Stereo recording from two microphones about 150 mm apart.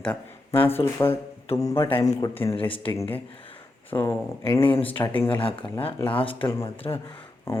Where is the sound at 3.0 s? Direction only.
10° left (ahead or behind).